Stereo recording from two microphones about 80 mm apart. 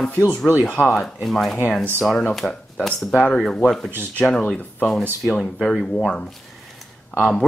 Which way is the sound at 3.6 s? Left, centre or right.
Centre.